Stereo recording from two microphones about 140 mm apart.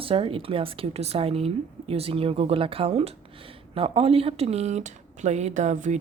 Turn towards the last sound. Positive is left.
turn(degrees=-60)  # may be behind; listen again after turning